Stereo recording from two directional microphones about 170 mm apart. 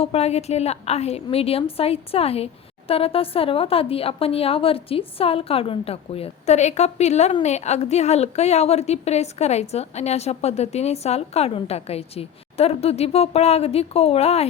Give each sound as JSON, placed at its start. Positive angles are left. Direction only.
{"t": 0.0, "sound": "a woman's voice", "side_deg": 35}